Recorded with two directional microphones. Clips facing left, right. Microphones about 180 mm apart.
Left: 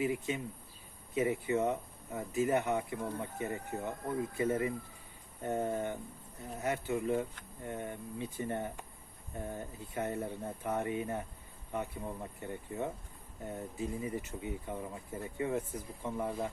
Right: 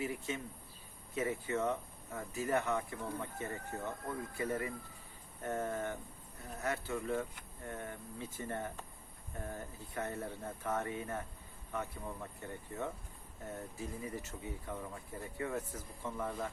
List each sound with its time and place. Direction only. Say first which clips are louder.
0.0 s speech: left 5 dB; 15° left (ahead or behind)
12.4 s speech: left 4 dB; 15° left (ahead or behind)